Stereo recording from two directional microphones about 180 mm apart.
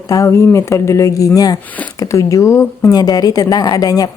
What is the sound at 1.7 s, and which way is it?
Speech, 10° left (ahead or behind).